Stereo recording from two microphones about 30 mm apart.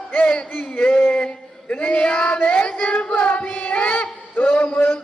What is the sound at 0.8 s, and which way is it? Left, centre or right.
Music, left.